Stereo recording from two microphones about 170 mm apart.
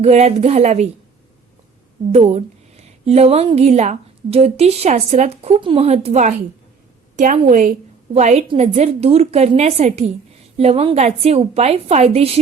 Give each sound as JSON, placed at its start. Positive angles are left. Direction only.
{"t": 0.0, "sound": "a woman's voice", "side_deg": -40}
{"t": 2.1, "sound": "a woman's voice", "side_deg": -40}
{"t": 7.4, "sound": "a woman's voice", "side_deg": -50}